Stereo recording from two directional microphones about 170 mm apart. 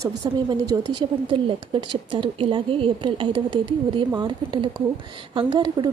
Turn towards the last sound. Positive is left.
turn(degrees=-25)  # may be behind; listen again after turning